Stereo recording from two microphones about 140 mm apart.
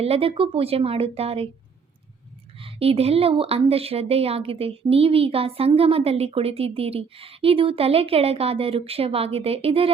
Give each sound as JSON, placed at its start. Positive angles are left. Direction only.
{"t": 0.0, "sound": "a woman's voice", "side_deg": -45}
{"t": 2.6, "sound": "a woman's voice", "side_deg": -40}